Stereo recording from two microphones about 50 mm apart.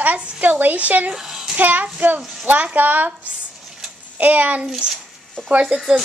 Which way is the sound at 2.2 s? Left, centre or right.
Centre.